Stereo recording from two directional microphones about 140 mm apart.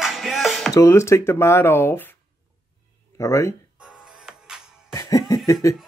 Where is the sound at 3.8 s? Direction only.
5° right (ahead or behind).